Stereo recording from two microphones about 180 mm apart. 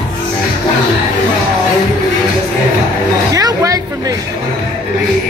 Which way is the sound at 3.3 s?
20° right (ahead or behind).